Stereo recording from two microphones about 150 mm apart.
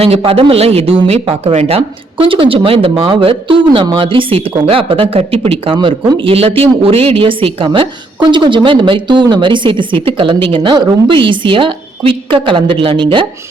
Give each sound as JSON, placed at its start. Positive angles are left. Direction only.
{"t": 0.0, "sound": "speech", "side_deg": -40}